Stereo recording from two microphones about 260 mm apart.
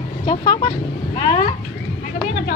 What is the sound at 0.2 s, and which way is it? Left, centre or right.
Vehicle, centre.